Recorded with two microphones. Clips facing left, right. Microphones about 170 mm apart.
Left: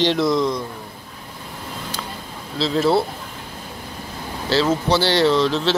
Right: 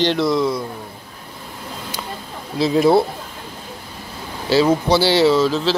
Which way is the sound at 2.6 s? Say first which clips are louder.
Right 4 dB; 15° right (ahead or behind).